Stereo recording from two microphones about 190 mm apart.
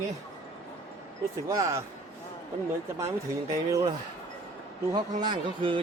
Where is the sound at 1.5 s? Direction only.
15° right (ahead or behind).